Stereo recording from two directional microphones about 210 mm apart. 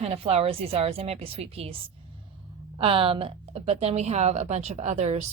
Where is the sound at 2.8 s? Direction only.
25° right (ahead or behind).